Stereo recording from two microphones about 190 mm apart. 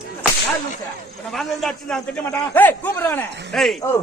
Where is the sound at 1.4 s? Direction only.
5° left (ahead or behind).